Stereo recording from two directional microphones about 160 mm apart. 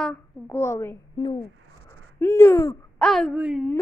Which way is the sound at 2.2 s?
15° left (ahead or behind).